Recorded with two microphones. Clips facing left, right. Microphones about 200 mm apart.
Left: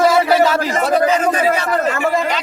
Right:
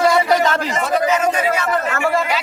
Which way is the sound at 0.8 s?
35° left (ahead or behind).